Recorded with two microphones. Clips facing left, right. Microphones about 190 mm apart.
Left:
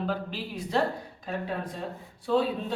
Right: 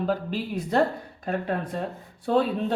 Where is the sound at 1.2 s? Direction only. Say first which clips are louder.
Right 5 dB; 55° right (ahead or behind).